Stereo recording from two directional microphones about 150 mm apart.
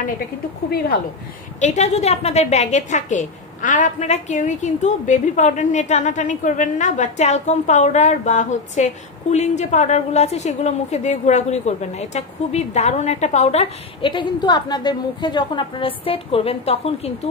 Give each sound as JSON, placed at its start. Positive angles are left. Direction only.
{"t": 1.6, "sound": "a woman's voice", "side_deg": 50}
{"t": 14.0, "sound": "a woman's voice", "side_deg": 30}